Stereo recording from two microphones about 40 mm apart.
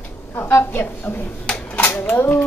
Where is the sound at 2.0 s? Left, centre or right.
Left.